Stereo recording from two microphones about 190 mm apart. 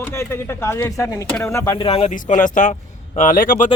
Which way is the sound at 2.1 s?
40° left (ahead or behind).